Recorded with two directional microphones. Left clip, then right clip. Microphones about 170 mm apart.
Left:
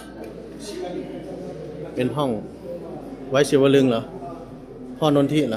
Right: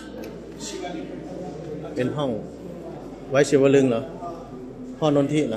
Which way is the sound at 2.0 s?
20° left (ahead or behind).